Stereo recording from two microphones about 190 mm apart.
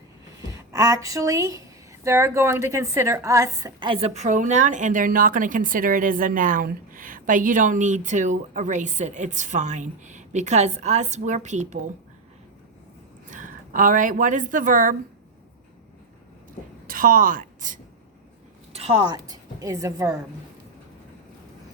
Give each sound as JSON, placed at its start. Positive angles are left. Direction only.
{"t": 0.4, "sound": "a woman's voice", "side_deg": -15}
{"t": 13.3, "sound": "speech", "side_deg": -45}
{"t": 16.8, "sound": "a woman's voice", "side_deg": -45}
{"t": 18.7, "sound": "a woman's voice", "side_deg": -30}